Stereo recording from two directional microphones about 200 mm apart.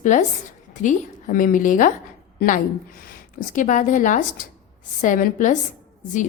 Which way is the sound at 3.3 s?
40° left (ahead or behind).